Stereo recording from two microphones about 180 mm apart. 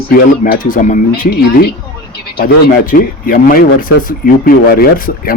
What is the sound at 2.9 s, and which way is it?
Speech, 50° left (ahead or behind).